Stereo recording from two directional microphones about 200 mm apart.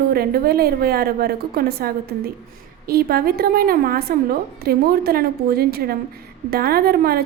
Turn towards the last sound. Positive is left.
turn(degrees=-50)  # may be behind; listen again after turning